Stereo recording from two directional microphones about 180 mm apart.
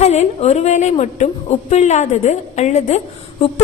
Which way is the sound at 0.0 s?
35° left (ahead or behind).